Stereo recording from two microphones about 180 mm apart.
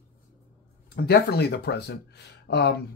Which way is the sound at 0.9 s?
65° left (ahead or behind).